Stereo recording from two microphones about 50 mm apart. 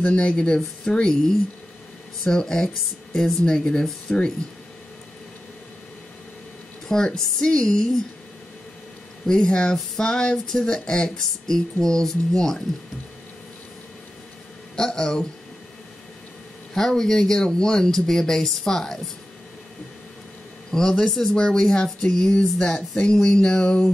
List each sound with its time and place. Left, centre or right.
0.0 s speech: left
2.2 s speech: centre
6.9 s speech: centre
9.2 s speech: centre
14.8 s speech: centre
16.7 s speech: centre
20.7 s speech: centre